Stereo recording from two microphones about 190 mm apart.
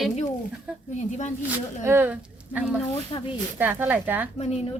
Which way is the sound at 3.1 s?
25° left (ahead or behind).